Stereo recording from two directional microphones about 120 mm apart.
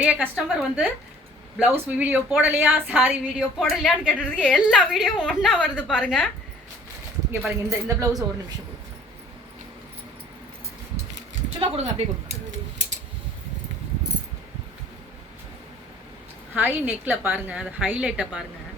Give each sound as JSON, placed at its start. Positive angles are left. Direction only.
{"t": 0.0, "sound": "a woman's voice", "side_deg": -10}
{"t": 3.6, "sound": "a woman's voice", "side_deg": 0}
{"t": 5.7, "sound": "a woman's voice", "side_deg": 10}
{"t": 7.3, "sound": "speech", "side_deg": -20}
{"t": 11.6, "sound": "a woman's voice", "side_deg": -55}
{"t": 16.6, "sound": "a woman's voice", "side_deg": -15}